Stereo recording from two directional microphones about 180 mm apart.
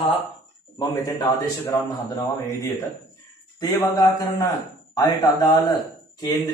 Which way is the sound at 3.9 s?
20° left (ahead or behind).